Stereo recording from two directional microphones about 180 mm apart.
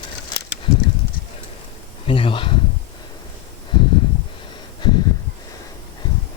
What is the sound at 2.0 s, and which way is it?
Speech, 30° left (ahead or behind).